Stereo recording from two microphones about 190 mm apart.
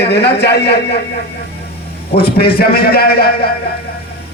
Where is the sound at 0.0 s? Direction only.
60° left (ahead or behind).